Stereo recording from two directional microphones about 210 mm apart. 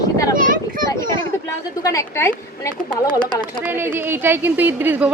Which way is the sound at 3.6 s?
10° right (ahead or behind).